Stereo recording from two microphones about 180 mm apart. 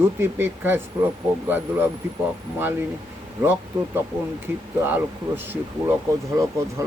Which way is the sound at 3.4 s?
10° right (ahead or behind).